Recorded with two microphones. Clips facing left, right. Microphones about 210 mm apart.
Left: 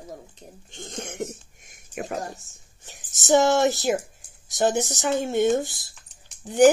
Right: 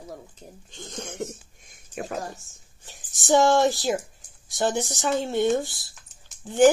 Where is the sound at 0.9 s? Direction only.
20° left (ahead or behind).